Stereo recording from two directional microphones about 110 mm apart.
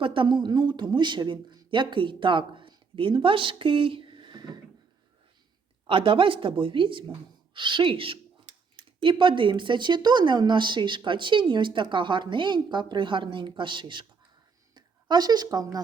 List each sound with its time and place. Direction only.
0.0 s speech: 50° right (ahead or behind)
5.9 s a woman's voice: 50° right (ahead or behind); by 15.8 s 35° right (ahead or behind)